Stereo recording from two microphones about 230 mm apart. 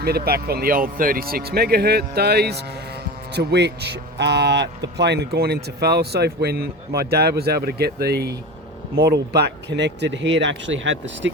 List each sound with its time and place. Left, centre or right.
0.0 s speech: right